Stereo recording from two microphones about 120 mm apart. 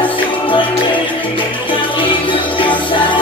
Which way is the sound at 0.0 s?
45° left (ahead or behind).